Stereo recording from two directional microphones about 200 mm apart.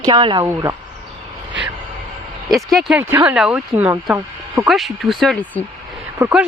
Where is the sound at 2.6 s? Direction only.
Centre (ahead or behind).